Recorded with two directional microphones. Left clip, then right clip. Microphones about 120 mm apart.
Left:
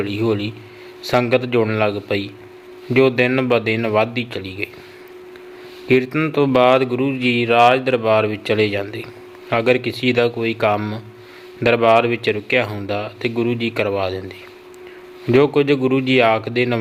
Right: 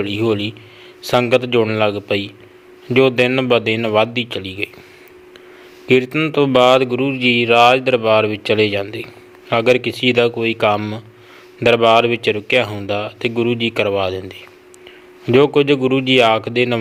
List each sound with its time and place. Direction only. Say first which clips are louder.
0.0 s speech: right 2 dB; 25° right (ahead or behind)
5.9 s speech: right 2 dB; 25° right (ahead or behind)